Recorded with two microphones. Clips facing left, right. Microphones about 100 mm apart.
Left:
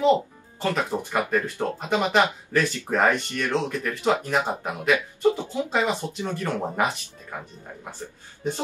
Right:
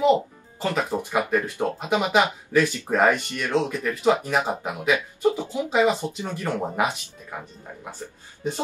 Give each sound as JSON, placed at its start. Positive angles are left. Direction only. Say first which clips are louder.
{"t": 0.0, "sound": "speech", "louder": "right 1 dB", "side_deg": -15}